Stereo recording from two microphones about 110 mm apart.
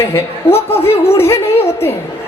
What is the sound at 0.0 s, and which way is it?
A man's voice, 25° left (ahead or behind).